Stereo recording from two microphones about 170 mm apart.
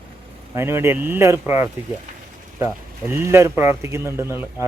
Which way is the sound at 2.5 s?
15° right (ahead or behind).